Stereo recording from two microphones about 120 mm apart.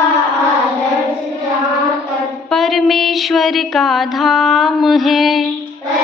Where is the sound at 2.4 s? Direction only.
Centre (ahead or behind).